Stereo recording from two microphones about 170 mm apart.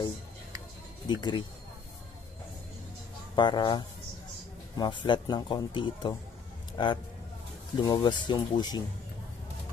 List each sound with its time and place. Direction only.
1.0 s speech: 25° left (ahead or behind)
3.3 s speech: 25° left (ahead or behind)